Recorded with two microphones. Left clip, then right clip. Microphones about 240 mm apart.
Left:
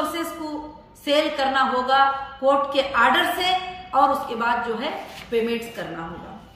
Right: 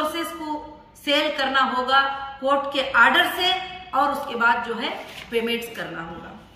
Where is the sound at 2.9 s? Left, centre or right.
Centre.